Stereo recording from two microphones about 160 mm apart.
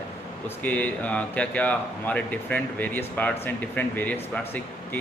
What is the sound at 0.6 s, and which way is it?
Speech, 10° left (ahead or behind).